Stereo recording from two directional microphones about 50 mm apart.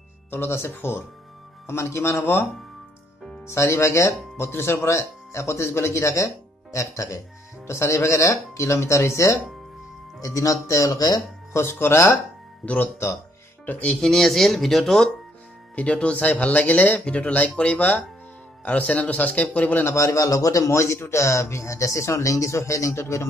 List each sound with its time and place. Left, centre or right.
0.3 s speech: left
1.7 s speech: left
3.4 s speech: left
4.4 s speech: left
7.6 s speech: left
11.5 s speech: left
12.6 s speech: left
13.9 s speech: centre
15.7 s speech: left
17.0 s speech: left
19.8 s speech: left